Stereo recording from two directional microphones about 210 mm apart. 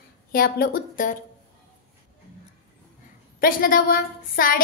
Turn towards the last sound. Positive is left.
turn(degrees=45)  # may be behind; listen again after turning